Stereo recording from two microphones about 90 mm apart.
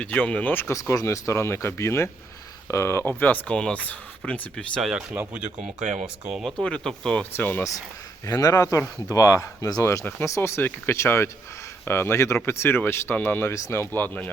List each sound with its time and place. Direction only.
0.0 s speech: 15° left (ahead or behind)
0.7 s speech: 35° left (ahead or behind)
3.1 s speech: 20° left (ahead or behind)
4.8 s speech: 5° right (ahead or behind)
6.6 s speech: 10° left (ahead or behind)
7.3 s speech: 20° left (ahead or behind)
8.3 s speech: 40° left (ahead or behind)
9.8 s speech: 30° left (ahead or behind)